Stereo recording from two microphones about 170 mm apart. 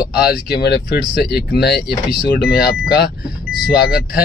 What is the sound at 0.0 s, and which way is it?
Speech, 65° left (ahead or behind).